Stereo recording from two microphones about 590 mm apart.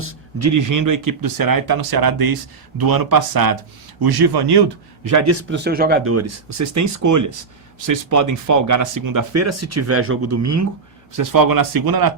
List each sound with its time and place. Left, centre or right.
0.0 s speech: right
5.0 s speech: right